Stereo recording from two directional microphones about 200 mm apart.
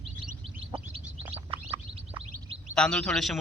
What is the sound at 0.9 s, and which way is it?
Bird, 30° right (ahead or behind).